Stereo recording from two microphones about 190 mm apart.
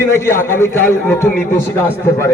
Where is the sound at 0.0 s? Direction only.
15° left (ahead or behind).